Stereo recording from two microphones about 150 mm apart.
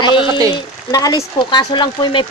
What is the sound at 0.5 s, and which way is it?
Speech, 25° left (ahead or behind).